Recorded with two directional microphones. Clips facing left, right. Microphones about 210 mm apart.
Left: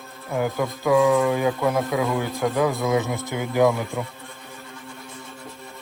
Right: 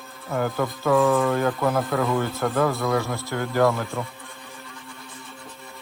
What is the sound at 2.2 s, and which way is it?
Speech, 15° left (ahead or behind).